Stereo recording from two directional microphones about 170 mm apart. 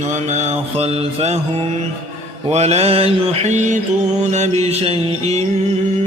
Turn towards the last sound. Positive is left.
turn(degrees=-35)  # may be behind; listen again after turning